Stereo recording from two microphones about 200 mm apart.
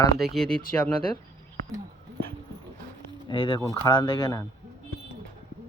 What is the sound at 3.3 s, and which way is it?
Speech, 25° left (ahead or behind).